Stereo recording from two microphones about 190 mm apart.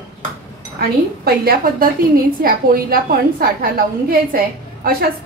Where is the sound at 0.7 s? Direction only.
55° right (ahead or behind).